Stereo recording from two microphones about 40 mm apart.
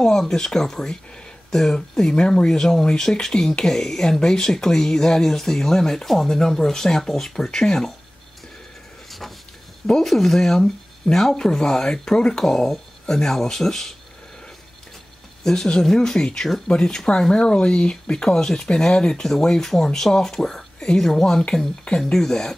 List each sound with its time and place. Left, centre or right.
0.0 s speech: centre
10.0 s speech: centre
15.4 s speech: centre
16.9 s speech: centre